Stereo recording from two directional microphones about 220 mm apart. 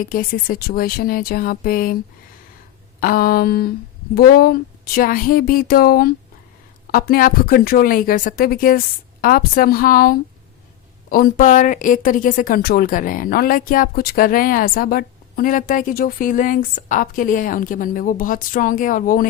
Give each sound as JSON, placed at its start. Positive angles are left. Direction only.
{"t": 0.0, "sound": "speech", "side_deg": 40}
{"t": 3.0, "sound": "speech", "side_deg": 40}